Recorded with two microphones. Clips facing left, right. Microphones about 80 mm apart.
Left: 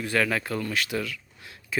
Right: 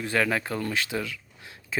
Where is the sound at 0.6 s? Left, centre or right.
Right.